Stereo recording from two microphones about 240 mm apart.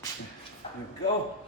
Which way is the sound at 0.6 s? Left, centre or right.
Left.